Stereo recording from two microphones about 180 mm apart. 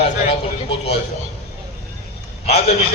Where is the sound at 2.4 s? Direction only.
35° left (ahead or behind).